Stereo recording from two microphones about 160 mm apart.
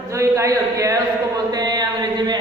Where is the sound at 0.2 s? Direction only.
20° right (ahead or behind).